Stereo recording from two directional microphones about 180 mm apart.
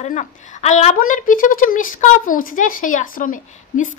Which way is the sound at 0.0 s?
40° left (ahead or behind).